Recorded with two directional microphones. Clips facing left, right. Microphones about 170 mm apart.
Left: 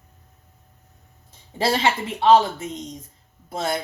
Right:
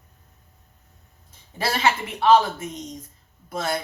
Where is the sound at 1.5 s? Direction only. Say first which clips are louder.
Left 2 dB; 25° left (ahead or behind).